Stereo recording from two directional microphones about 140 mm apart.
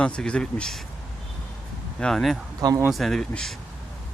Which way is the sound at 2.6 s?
25° right (ahead or behind).